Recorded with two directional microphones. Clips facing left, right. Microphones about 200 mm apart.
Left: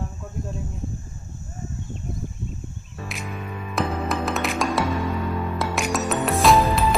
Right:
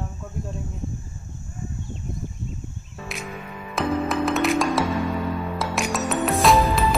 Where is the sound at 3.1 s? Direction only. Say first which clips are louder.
Right 2 dB; centre (ahead or behind).